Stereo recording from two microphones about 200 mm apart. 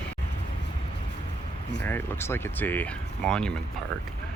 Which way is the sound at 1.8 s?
10° left (ahead or behind).